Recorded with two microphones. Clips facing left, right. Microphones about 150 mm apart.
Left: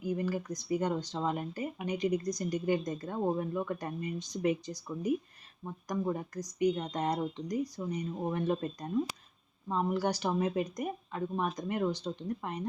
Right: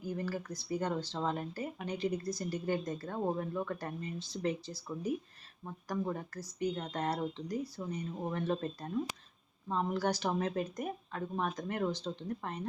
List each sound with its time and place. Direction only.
0.0 s speech: 15° left (ahead or behind)